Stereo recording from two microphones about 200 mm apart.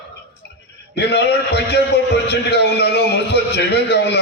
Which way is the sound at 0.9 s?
55° left (ahead or behind).